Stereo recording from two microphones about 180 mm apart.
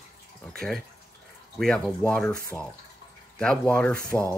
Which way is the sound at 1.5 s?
5° left (ahead or behind).